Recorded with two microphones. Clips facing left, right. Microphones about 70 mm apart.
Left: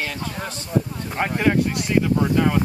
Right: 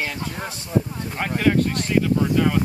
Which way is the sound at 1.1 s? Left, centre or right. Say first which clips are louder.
Even; centre.